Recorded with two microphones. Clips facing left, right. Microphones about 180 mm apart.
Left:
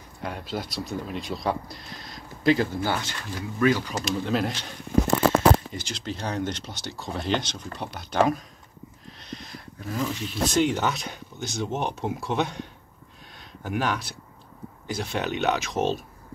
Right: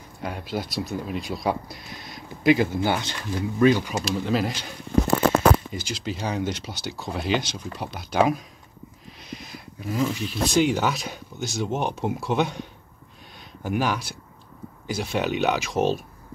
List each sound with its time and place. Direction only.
0.2 s speech: 5° right (ahead or behind); by 3.8 s 20° right (ahead or behind)
4.0 s speech: 5° right (ahead or behind)
13.7 s speech: 5° right (ahead or behind)